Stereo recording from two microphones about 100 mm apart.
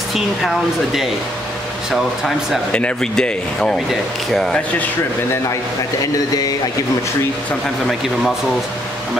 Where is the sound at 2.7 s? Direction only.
10° left (ahead or behind).